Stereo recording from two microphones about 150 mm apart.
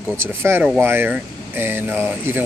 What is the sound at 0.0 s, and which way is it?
Speech, 15° right (ahead or behind).